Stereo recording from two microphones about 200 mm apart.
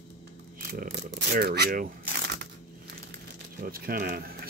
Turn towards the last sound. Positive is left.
turn(degrees=-50)  # may be behind; listen again after turning